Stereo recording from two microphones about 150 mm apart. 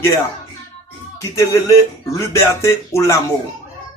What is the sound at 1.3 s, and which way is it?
A man's voice, 20° left (ahead or behind).